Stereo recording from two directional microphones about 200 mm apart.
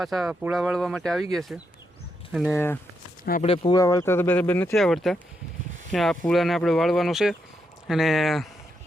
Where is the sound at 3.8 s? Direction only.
15° left (ahead or behind); by 8.5 s centre (ahead or behind).